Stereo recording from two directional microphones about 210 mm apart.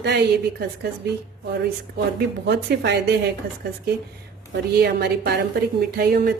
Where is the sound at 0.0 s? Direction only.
50° right (ahead or behind).